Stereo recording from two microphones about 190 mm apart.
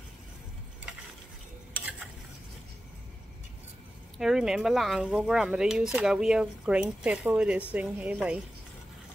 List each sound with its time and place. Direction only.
4.2 s a woman's voice: centre (ahead or behind)